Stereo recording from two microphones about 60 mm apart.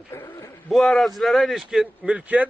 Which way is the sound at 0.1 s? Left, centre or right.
Left.